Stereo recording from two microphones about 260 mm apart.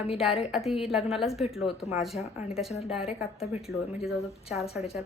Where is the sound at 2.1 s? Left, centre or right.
Left.